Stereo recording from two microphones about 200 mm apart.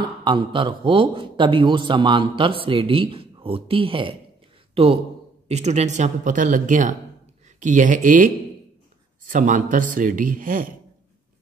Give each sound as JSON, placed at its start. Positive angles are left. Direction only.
{"t": 0.0, "sound": "a man's voice", "side_deg": -25}
{"t": 9.3, "sound": "speech", "side_deg": -40}